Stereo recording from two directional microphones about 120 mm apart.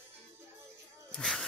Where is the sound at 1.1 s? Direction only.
5° left (ahead or behind).